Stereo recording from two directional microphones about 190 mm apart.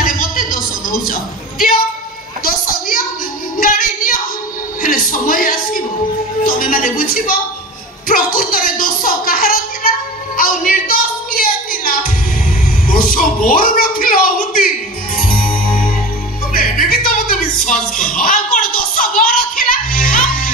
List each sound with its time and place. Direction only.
2.4 s a sound: 45° left (ahead or behind)
3.5 s music: 45° left (ahead or behind)
4.8 s speech: 45° left (ahead or behind)
6.4 s a sound: 45° left (ahead or behind)
15.1 s music: 50° left (ahead or behind)
16.5 s music: 50° left (ahead or behind)